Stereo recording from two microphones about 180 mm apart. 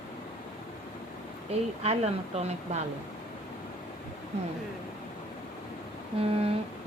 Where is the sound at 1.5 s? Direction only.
35° right (ahead or behind).